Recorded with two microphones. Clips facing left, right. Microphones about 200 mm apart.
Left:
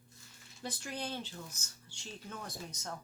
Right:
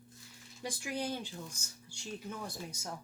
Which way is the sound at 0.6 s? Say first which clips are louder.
Right 3 dB; 10° right (ahead or behind).